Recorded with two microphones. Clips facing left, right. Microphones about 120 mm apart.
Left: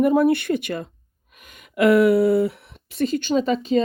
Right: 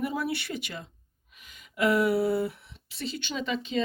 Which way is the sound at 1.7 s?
65° left (ahead or behind).